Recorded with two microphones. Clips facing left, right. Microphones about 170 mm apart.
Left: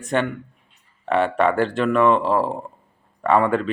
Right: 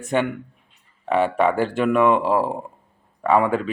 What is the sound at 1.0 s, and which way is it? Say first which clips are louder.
Speech: even; 10° right (ahead or behind).